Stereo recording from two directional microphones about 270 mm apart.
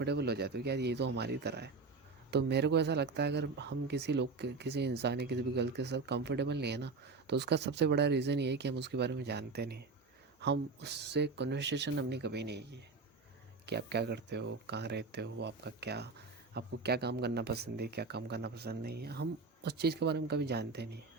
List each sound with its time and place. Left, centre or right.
0.0 s speech: right